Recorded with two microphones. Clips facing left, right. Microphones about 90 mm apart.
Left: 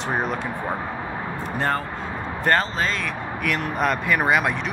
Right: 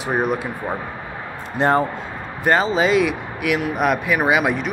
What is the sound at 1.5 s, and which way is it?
Speech, 20° right (ahead or behind).